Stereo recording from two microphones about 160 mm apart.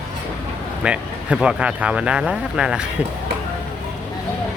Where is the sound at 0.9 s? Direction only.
5° right (ahead or behind).